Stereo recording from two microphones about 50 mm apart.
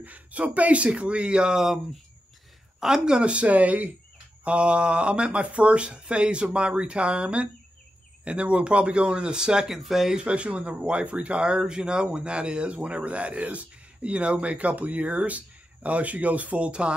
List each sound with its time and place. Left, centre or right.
0.0 s speech: right; by 1.8 s centre
2.8 s speech: centre
3.2 s speech: right; by 10.1 s centre
10.1 s speech: right